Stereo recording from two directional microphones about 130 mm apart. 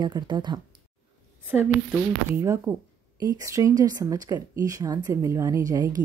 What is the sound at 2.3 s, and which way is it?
A woman's voice, 20° right (ahead or behind).